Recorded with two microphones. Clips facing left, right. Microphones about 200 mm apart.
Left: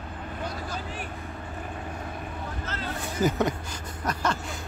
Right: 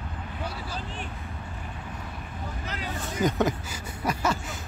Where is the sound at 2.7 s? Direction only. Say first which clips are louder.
Even; 10° right (ahead or behind).